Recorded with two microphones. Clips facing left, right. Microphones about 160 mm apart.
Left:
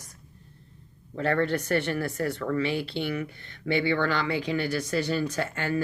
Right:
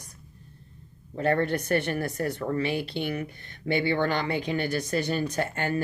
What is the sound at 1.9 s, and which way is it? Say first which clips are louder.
Speech: even; 45° right (ahead or behind).